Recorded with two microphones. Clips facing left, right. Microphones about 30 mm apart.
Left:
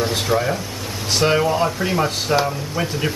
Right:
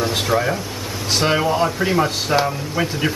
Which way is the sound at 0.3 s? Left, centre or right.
Centre.